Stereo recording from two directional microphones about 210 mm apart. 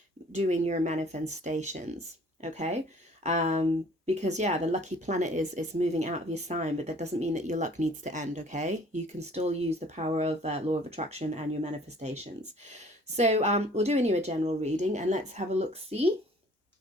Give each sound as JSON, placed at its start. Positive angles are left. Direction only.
{"t": 0.3, "sound": "speech", "side_deg": -30}